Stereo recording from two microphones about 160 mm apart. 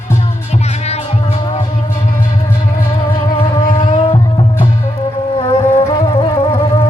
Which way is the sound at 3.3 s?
40° left (ahead or behind).